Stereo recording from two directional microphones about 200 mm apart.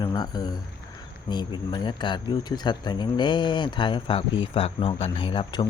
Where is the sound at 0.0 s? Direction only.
20° left (ahead or behind).